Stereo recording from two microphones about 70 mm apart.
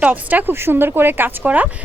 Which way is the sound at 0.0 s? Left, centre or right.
Right.